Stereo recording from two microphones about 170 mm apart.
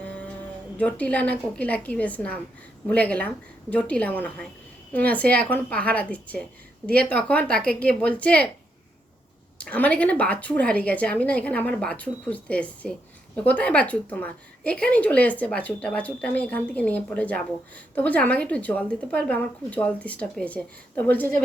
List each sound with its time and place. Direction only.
0.0 s music: 10° left (ahead or behind)
0.8 s a woman's voice: 10° left (ahead or behind)
9.6 s a woman's voice: 10° left (ahead or behind)